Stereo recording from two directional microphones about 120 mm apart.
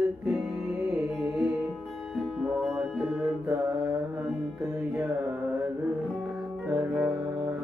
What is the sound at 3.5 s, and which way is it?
Mantra, 20° right (ahead or behind).